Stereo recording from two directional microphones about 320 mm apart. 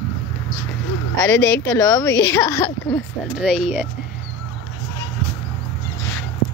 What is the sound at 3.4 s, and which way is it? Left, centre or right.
Speech, centre.